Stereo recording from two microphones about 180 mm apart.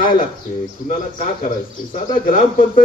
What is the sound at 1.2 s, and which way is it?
Speech, 45° left (ahead or behind).